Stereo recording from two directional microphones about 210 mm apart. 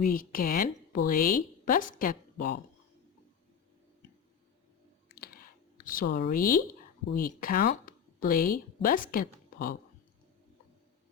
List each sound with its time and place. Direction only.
0.0 s speech: 40° left (ahead or behind)
5.0 s clicking: 45° left (ahead or behind)
7.1 s speech: 45° left (ahead or behind)